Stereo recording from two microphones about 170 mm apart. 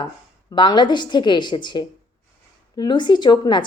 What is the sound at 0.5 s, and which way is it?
A woman's voice, 25° left (ahead or behind).